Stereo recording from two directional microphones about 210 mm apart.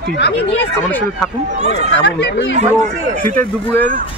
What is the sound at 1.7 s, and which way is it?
Speech, 55° left (ahead or behind).